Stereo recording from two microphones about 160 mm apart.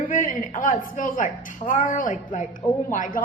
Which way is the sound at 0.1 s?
55° left (ahead or behind).